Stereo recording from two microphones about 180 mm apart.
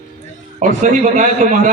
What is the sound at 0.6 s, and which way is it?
A man's voice, 45° right (ahead or behind).